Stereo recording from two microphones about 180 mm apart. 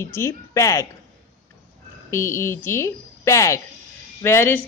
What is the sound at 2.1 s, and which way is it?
A woman's voice, 15° left (ahead or behind).